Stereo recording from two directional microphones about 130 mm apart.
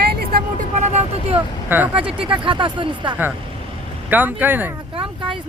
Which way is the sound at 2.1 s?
40° right (ahead or behind).